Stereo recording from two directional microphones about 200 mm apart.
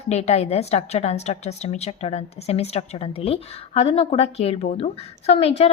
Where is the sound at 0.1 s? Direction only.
30° left (ahead or behind).